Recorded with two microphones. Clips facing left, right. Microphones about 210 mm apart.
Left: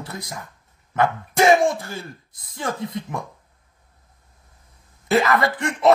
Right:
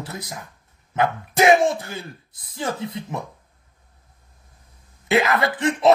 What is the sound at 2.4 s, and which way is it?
Speech, 25° right (ahead or behind).